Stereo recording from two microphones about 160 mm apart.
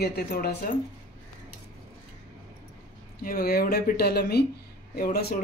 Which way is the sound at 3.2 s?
70° left (ahead or behind).